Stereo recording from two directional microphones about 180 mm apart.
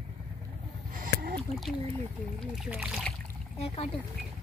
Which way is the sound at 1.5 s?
35° left (ahead or behind).